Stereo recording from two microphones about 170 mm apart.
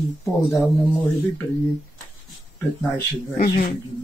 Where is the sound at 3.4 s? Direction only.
60° left (ahead or behind).